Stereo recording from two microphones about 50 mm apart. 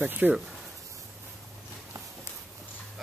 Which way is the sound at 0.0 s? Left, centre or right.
Right.